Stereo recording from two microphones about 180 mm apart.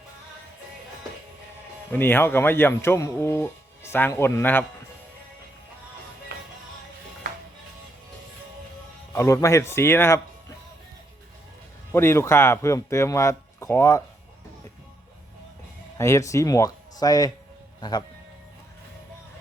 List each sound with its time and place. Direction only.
1.9 s speech: 10° left (ahead or behind)
9.1 s speech: 15° left (ahead or behind)
11.9 s speech: 15° left (ahead or behind)
16.0 s speech: 15° left (ahead or behind)